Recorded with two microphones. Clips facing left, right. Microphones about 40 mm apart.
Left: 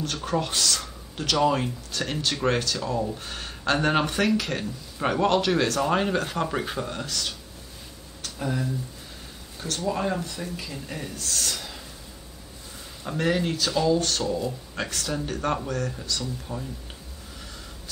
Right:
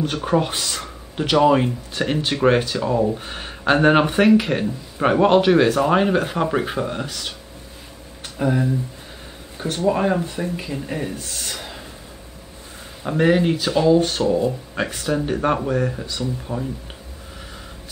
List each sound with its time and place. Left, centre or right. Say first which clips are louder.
0.0 s speech: right 7 dB; right
13.0 s speech: right 8 dB; right